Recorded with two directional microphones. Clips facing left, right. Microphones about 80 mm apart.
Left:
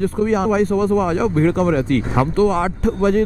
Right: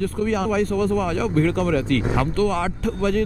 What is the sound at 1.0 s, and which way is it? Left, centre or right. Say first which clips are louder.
Speech: left 4 dB; left.